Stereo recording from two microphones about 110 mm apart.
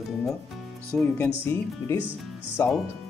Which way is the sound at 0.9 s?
10° left (ahead or behind).